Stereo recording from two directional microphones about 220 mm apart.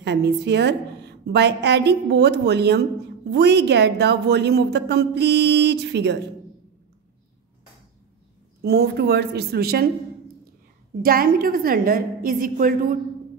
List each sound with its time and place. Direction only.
0.0 s a woman's voice: 50° right (ahead or behind)
8.6 s a woman's voice: 50° right (ahead or behind)
11.0 s a woman's voice: 40° right (ahead or behind)